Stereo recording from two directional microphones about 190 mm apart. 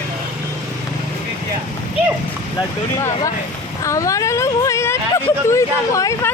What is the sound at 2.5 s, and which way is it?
Vehicle, 15° left (ahead or behind).